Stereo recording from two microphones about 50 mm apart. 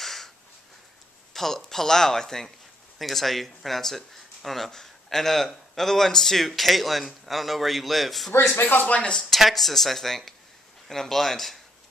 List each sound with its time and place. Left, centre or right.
0.0 s a sound: centre
1.3 s speech: centre
8.5 s speech: left
8.8 s speech: left
9.3 s speech: centre